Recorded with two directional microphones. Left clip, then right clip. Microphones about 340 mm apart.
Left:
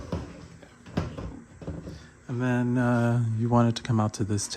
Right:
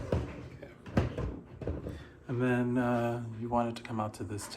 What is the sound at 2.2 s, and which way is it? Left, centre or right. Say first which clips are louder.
Speech: left 2 dB; left.